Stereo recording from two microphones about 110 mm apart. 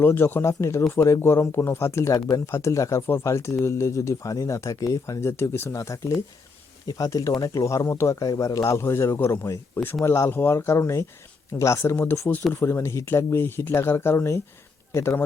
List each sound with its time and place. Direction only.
0.0 s speech: 20° left (ahead or behind)